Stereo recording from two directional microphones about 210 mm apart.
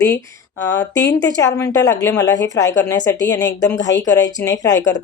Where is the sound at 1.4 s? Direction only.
15° left (ahead or behind).